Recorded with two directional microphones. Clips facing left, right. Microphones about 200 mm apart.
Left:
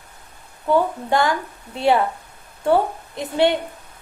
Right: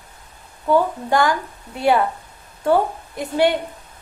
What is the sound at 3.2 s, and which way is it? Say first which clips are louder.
Speech: even; 25° left (ahead or behind).